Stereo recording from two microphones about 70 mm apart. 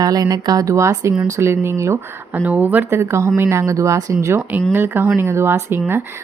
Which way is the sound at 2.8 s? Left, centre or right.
Right.